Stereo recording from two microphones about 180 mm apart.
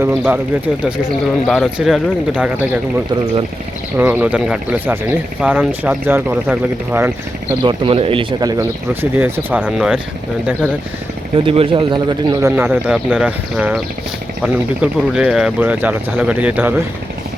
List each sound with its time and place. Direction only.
0.0 s speech: 10° right (ahead or behind)
1.5 s speech: centre (ahead or behind)
3.9 s speech: 10° right (ahead or behind)
7.6 s speech: 30° right (ahead or behind); by 10.0 s 5° right (ahead or behind)
11.3 s speech: 30° right (ahead or behind); by 16.7 s 10° right (ahead or behind)